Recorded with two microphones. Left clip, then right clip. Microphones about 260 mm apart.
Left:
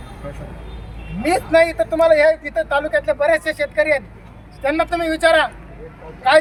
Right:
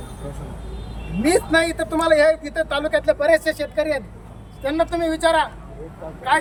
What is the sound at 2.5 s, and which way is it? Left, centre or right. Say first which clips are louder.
Speech: left 2 dB; centre.